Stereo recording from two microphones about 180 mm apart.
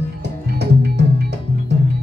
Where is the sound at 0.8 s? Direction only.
70° right (ahead or behind).